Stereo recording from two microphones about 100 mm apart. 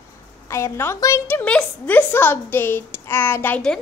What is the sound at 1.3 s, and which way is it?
A woman's voice, 15° left (ahead or behind).